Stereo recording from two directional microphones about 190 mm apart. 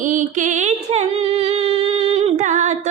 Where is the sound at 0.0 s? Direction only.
40° right (ahead or behind).